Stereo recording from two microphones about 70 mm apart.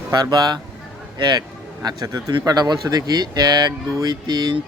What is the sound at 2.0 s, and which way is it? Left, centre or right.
Speech, right.